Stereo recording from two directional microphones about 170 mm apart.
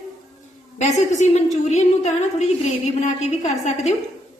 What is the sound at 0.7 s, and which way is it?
A woman's voice, 40° left (ahead or behind).